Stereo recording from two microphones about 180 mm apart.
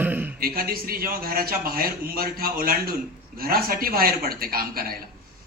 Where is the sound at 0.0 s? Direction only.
10° right (ahead or behind).